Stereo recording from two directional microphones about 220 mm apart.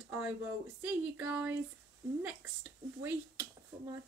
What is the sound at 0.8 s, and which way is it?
Speech, 10° right (ahead or behind).